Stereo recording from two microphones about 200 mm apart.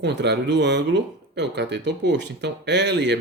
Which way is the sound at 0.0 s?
60° right (ahead or behind).